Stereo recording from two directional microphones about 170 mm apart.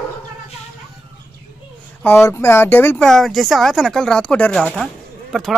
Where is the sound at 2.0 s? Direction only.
10° left (ahead or behind).